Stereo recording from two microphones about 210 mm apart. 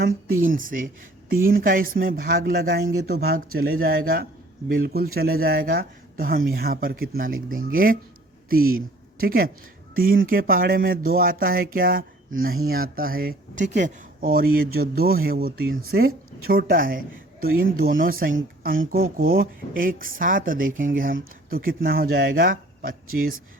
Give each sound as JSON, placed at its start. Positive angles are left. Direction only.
{"t": 0.4, "sound": "speech", "side_deg": -40}
{"t": 15.7, "sound": "speech", "side_deg": -85}
{"t": 16.5, "sound": "speech", "side_deg": -45}